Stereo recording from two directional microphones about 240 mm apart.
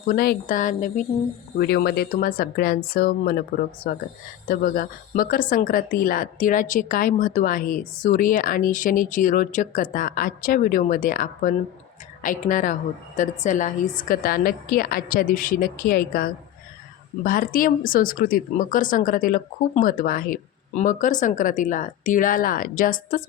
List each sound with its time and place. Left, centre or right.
0.1 s a woman's voice: left
1.5 s a woman's voice: left